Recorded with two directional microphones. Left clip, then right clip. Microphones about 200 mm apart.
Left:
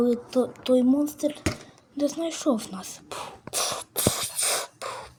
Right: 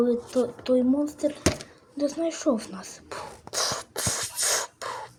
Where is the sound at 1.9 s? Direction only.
30° left (ahead or behind).